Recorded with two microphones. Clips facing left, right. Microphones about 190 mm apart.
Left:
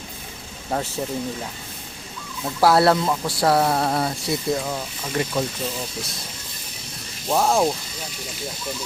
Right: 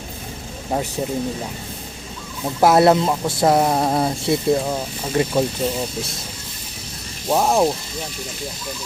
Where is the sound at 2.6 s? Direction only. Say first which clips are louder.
Right 3 dB; 20° right (ahead or behind).